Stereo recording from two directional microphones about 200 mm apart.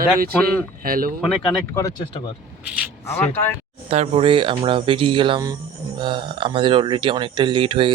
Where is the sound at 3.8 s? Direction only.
30° right (ahead or behind).